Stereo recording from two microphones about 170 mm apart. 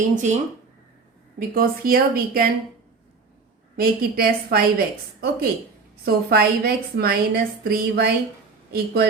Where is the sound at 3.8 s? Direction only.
60° right (ahead or behind).